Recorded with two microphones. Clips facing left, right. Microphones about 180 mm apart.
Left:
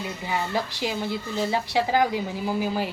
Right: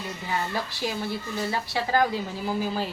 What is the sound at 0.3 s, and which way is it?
A woman's voice, 15° left (ahead or behind).